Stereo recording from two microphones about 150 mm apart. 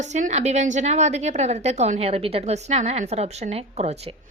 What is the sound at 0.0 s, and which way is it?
A woman's voice, 50° right (ahead or behind).